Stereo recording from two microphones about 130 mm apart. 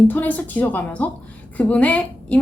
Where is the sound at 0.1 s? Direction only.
10° left (ahead or behind).